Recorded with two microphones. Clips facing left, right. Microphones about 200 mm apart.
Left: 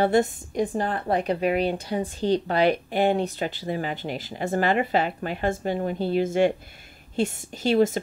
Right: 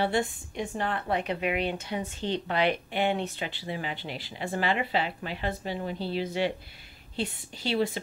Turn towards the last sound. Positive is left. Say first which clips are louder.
# left 7 dB
turn(degrees=45)  # may be behind; listen again after turning